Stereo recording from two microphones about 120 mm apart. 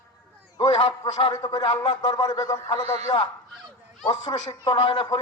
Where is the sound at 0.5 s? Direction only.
35° left (ahead or behind).